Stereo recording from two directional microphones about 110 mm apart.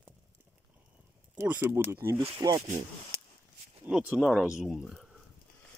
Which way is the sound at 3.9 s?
10° right (ahead or behind).